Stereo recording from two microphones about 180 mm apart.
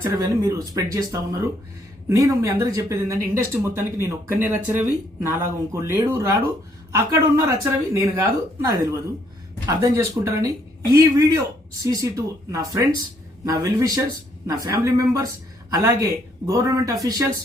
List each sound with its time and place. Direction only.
0.0 s speech: 20° right (ahead or behind)